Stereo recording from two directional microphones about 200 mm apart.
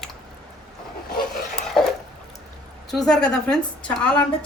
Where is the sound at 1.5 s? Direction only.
Centre (ahead or behind).